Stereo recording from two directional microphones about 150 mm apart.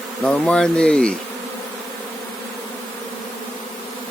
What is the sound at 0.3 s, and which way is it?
Speech, 5° left (ahead or behind).